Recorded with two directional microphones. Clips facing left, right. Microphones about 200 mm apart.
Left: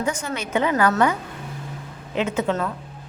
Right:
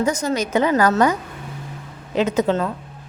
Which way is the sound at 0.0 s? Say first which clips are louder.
Right 6 dB; 40° right (ahead or behind).